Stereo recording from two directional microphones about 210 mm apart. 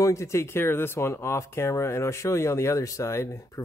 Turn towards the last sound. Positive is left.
turn(degrees=15)  # may be behind; listen again after turning